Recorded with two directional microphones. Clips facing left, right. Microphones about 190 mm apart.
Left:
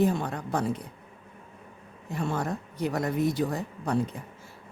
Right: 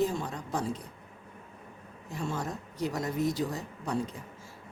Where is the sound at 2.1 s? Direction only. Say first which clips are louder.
Left 5 dB; 60° left (ahead or behind).